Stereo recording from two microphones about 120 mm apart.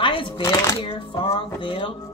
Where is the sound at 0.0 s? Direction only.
45° left (ahead or behind).